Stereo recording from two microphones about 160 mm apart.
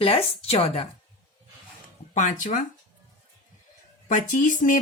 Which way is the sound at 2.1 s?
50° left (ahead or behind).